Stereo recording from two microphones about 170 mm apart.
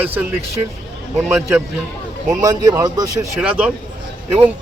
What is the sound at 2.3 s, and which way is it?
Speech, 20° right (ahead or behind).